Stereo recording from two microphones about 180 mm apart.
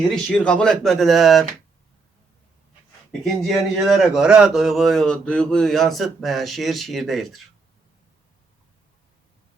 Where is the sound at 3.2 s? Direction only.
Centre (ahead or behind).